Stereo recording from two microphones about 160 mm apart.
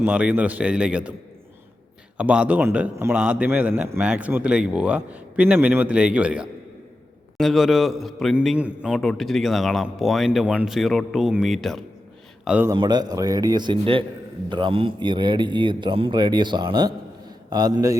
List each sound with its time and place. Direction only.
0.0 s a man's voice: 10° right (ahead or behind)
2.1 s a man's voice: 5° right (ahead or behind)
12.5 s a man's voice: 10° right (ahead or behind)
12.7 s a man's voice: 25° right (ahead or behind)